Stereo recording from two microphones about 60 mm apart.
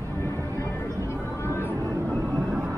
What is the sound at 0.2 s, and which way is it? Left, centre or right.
Music, left.